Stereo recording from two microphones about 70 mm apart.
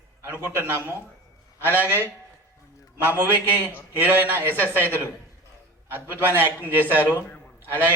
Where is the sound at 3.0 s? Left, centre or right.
Right.